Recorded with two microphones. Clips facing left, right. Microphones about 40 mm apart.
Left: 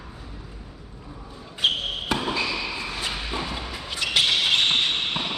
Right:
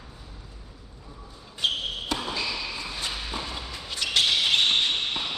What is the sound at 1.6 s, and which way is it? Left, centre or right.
Basketball bounce, left.